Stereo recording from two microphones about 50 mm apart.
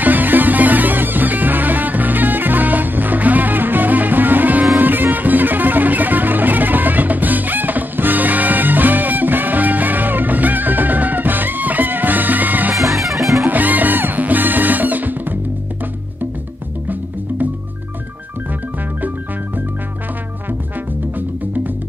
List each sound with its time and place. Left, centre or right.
0.0 s music: right
12.9 s music: centre
13.5 s music: right